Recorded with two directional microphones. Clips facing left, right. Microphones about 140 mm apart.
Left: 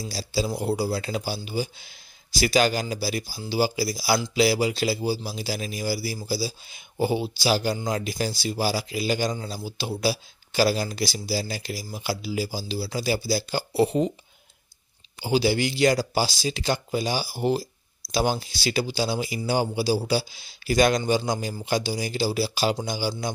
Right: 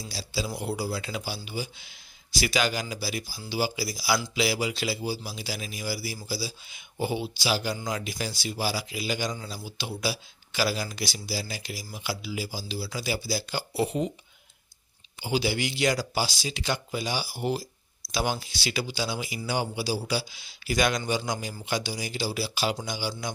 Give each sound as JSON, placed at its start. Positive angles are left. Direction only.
{"t": 0.1, "sound": "a man's voice", "side_deg": 40}
{"t": 15.2, "sound": "a man's voice", "side_deg": 35}